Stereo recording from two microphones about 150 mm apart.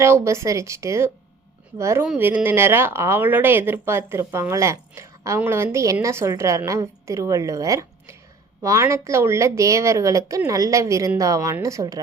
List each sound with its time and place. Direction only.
0.0 s a woman's voice: 20° right (ahead or behind)